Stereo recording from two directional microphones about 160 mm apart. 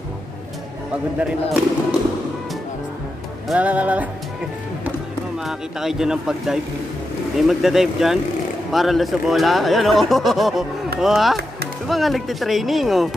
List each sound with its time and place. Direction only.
1.2 s speech: 5° right (ahead or behind)
3.4 s speech: 10° right (ahead or behind)
5.4 s speech: 5° right (ahead or behind)